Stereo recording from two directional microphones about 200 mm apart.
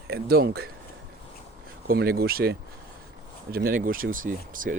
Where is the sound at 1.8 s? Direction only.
50° right (ahead or behind).